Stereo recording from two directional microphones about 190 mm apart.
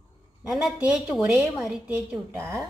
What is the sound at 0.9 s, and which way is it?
Speech, 10° right (ahead or behind).